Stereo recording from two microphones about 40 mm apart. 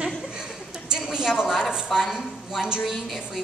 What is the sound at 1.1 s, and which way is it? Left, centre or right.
A woman's voice, centre.